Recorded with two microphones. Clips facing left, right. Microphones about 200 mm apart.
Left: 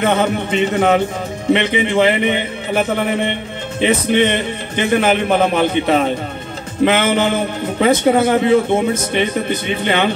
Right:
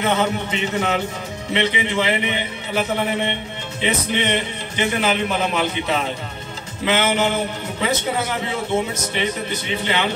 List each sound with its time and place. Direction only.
0.0 s a man's voice: 55° left (ahead or behind)